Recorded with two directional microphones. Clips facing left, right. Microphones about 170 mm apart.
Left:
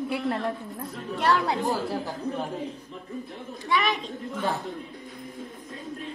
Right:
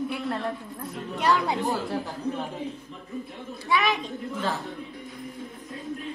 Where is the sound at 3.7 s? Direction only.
5° right (ahead or behind).